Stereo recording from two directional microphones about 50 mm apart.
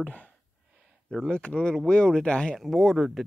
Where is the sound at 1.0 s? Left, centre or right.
Centre.